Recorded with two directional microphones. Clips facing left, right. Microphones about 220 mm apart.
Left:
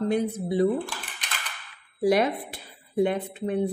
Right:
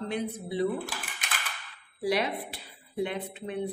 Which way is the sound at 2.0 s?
45° left (ahead or behind).